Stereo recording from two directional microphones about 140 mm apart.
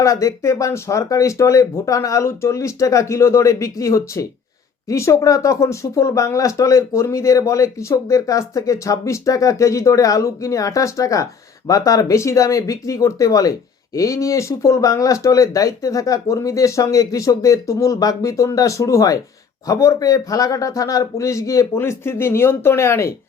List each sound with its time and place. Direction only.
0.0 s speech: 20° left (ahead or behind)